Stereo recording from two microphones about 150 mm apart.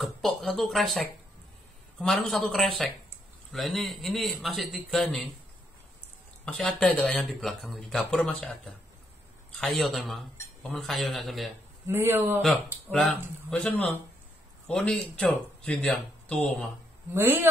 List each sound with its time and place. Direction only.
0.0 s speech: centre (ahead or behind)
6.4 s speech: 5° left (ahead or behind)
11.9 s speech: 15° right (ahead or behind)
12.9 s speech: 5° left (ahead or behind)
17.1 s speech: 15° right (ahead or behind)